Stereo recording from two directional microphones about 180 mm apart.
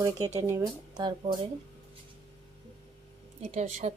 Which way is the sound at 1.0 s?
30° right (ahead or behind).